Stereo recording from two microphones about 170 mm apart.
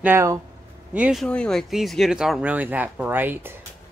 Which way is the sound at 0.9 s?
5° right (ahead or behind).